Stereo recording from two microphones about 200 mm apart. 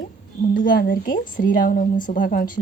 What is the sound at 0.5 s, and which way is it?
A woman's voice, 45° left (ahead or behind).